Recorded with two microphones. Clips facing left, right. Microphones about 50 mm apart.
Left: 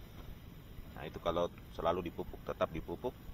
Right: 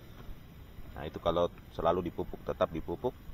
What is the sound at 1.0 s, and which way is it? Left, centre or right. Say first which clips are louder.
Speech: right 5 dB; right.